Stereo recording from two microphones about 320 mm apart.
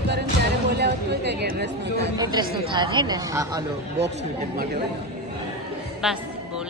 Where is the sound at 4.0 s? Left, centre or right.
Right.